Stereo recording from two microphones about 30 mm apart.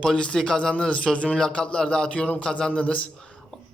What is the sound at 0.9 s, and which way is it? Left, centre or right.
A man's voice, left.